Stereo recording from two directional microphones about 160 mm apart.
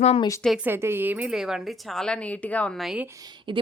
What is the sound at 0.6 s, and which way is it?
Speech, 15° right (ahead or behind).